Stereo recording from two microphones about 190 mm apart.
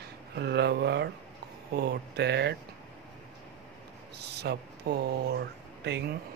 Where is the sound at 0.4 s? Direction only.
60° right (ahead or behind).